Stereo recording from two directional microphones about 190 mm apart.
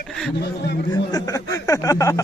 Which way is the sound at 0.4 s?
60° left (ahead or behind).